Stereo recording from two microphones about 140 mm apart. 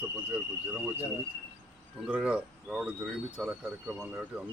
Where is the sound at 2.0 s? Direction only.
5° right (ahead or behind).